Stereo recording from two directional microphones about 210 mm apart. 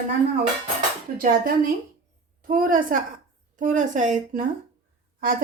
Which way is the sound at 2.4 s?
40° right (ahead or behind).